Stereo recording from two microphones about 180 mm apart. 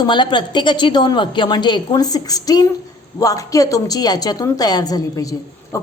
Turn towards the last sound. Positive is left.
turn(degrees=20)  # may be behind; listen again after turning